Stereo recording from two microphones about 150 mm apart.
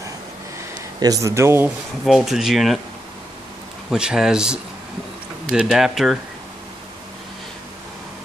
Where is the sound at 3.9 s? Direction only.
5° right (ahead or behind).